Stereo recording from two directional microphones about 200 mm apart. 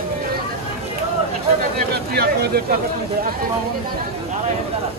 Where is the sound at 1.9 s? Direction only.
50° right (ahead or behind).